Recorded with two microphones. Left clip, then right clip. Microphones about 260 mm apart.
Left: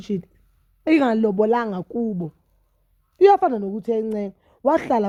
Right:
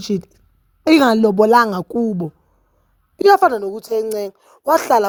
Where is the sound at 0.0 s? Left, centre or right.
Right.